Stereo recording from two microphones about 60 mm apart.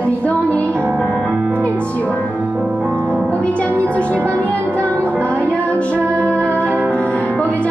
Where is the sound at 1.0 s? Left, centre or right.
Centre.